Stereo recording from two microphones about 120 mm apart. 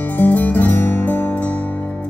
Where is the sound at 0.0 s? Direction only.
15° left (ahead or behind).